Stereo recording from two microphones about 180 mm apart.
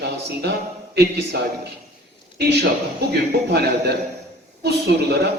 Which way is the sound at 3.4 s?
65° right (ahead or behind).